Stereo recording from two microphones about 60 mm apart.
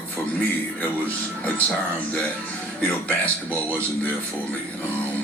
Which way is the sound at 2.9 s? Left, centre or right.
Left.